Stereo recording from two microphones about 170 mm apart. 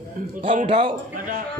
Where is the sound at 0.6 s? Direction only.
30° right (ahead or behind).